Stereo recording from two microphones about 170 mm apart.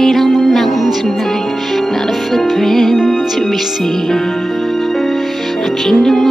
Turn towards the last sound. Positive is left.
turn(degrees=0)  # may be behind; listen again after turning